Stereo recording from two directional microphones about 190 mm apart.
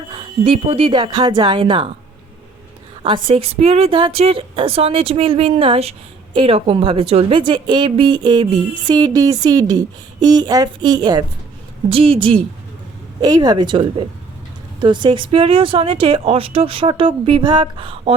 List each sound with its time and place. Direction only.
0.1 s speech: 25° right (ahead or behind)
3.0 s speech: 25° right (ahead or behind)